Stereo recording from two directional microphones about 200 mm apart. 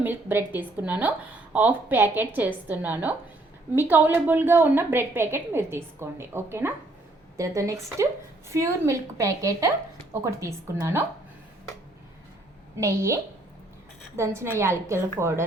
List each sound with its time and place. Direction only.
0.0 s a woman's voice: 10° right (ahead or behind)
12.7 s a woman's voice: 15° right (ahead or behind)
14.2 s a woman's voice: 15° right (ahead or behind)